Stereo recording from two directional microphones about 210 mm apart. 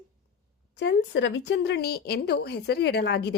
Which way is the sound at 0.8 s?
60° left (ahead or behind).